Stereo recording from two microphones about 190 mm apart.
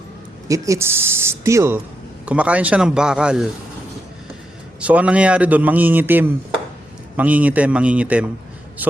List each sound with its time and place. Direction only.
0.4 s a man's voice: 15° right (ahead or behind)
4.8 s a man's voice: 5° right (ahead or behind)